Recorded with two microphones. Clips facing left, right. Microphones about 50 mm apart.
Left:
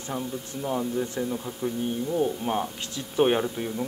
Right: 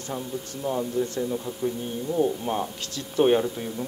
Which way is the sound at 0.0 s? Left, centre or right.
Centre.